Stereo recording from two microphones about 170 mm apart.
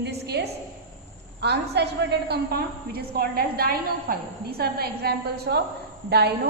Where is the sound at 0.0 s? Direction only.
75° right (ahead or behind).